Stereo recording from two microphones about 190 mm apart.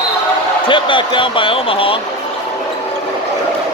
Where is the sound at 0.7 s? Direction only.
25° left (ahead or behind).